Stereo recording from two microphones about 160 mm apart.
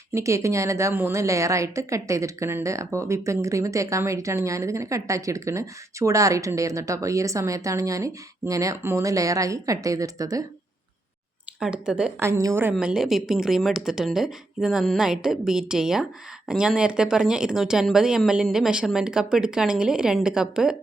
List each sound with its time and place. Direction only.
0.1 s a woman's voice: 20° right (ahead or behind)
11.6 s speech: 5° right (ahead or behind)
12.2 s a woman's voice: 20° right (ahead or behind)
12.7 s speech: 5° right (ahead or behind)